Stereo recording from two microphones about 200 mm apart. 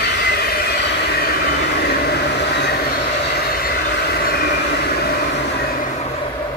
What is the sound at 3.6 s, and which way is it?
Train, 50° left (ahead or behind).